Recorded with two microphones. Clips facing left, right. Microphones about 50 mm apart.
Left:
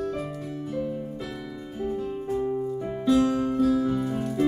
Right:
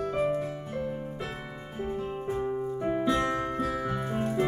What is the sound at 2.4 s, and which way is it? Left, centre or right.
Keyboard, centre.